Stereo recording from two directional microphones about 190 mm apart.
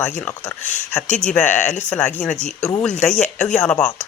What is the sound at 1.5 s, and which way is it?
Speech, 40° left (ahead or behind).